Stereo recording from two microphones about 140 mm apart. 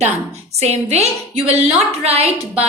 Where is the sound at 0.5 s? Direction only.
50° right (ahead or behind).